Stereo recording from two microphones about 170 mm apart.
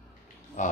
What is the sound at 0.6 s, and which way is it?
Speech, 45° left (ahead or behind).